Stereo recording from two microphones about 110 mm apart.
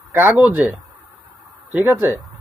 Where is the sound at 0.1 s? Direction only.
20° right (ahead or behind).